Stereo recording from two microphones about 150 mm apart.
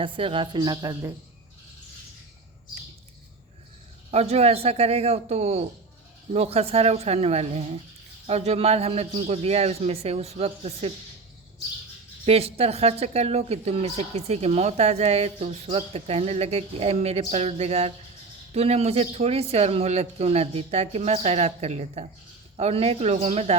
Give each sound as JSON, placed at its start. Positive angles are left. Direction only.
{"t": 0.0, "sound": "a woman's voice", "side_deg": -35}
{"t": 4.1, "sound": "speech", "side_deg": -45}
{"t": 12.2, "sound": "speech", "side_deg": -40}